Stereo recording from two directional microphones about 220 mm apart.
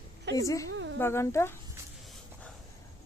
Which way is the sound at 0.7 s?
55° right (ahead or behind).